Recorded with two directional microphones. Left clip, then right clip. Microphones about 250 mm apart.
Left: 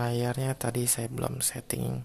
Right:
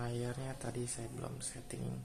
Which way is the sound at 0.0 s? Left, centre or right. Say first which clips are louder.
Left 11 dB; left.